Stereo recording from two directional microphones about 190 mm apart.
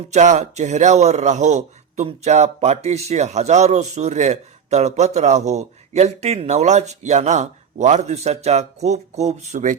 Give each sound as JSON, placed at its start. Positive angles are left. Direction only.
{"t": 0.1, "sound": "speech", "side_deg": -40}